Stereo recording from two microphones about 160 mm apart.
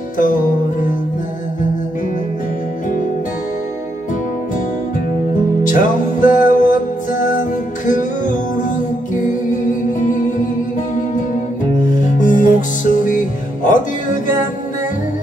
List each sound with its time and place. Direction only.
5.6 s music: 55° left (ahead or behind)
11.9 s music: 55° left (ahead or behind)